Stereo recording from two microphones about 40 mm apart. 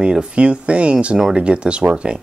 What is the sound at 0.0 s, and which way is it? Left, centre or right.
Speech, right.